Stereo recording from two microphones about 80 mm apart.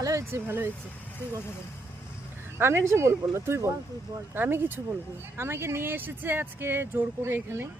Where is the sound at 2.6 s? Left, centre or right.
Right.